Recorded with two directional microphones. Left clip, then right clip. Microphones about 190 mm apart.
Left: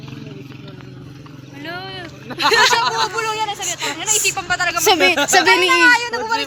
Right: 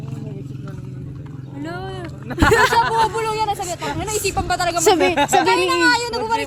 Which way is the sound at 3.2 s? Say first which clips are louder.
Even; 60° right (ahead or behind).